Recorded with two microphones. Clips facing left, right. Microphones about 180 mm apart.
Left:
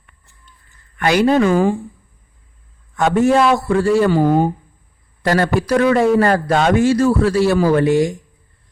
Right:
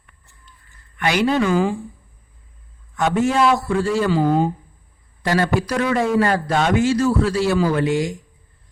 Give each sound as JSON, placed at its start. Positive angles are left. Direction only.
{"t": 0.9, "sound": "a woman's voice", "side_deg": 45}
{"t": 2.9, "sound": "a man's voice", "side_deg": 55}